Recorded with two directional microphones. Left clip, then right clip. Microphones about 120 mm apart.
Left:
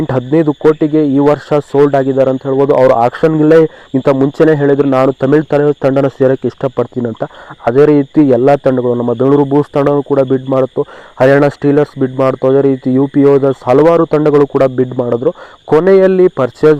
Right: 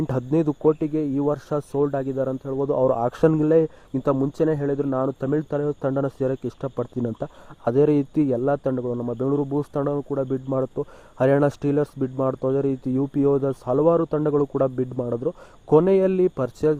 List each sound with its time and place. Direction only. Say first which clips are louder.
0.2 s speech: left 11 dB; 30° right (ahead or behind)
0.9 s a man's voice: left 14 dB; 10° right (ahead or behind)
3.1 s a man's voice: left 8 dB; 40° right (ahead or behind)
3.5 s a man's voice: left 12 dB; 10° right (ahead or behind)
7.0 s a man's voice: left 11 dB; 30° right (ahead or behind)
8.2 s a man's voice: left 14 dB; 10° right (ahead or behind)
8.4 s a man's voice: left 14 dB; centre (ahead or behind)
10.5 s a man's voice: left 13 dB; 25° right (ahead or behind)